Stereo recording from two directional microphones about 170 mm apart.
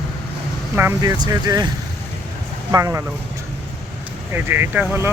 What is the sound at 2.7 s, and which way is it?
Speech, 20° right (ahead or behind).